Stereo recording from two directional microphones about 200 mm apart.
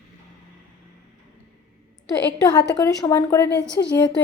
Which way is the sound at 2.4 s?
15° left (ahead or behind).